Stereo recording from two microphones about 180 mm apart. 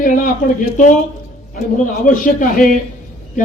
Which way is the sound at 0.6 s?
45° left (ahead or behind).